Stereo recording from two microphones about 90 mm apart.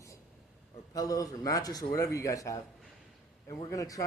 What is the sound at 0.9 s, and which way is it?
Speech, 40° left (ahead or behind).